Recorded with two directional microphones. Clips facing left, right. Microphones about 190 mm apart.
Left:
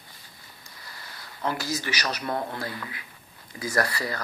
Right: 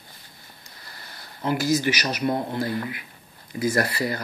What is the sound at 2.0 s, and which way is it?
Speech, 25° right (ahead or behind).